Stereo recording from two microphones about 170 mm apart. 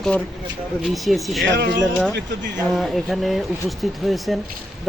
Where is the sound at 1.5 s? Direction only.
75° right (ahead or behind).